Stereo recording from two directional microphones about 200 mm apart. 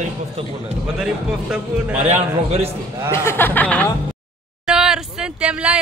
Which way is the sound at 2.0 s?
30° right (ahead or behind).